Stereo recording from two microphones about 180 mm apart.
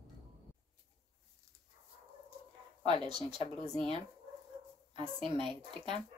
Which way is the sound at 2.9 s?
25° right (ahead or behind).